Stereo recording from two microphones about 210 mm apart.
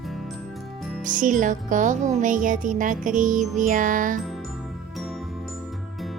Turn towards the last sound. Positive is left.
turn(degrees=0)  # may be behind; listen again after turning